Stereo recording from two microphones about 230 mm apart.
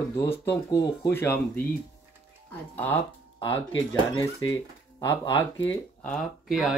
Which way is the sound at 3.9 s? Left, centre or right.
Centre.